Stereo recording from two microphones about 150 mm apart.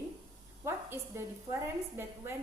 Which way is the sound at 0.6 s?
20° right (ahead or behind).